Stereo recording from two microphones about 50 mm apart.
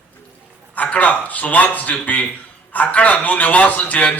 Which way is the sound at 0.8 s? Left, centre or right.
Left.